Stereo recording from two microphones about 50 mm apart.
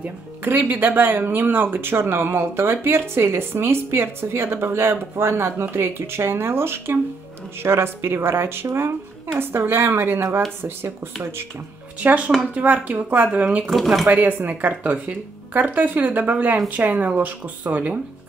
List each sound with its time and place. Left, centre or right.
0.4 s speech: right
12.0 s speech: right
13.7 s speech: centre
14.0 s speech: right